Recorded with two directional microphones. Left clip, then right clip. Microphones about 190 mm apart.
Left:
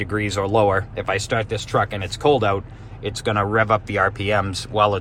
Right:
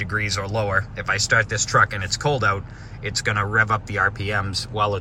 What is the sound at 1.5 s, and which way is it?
Speech, 10° left (ahead or behind).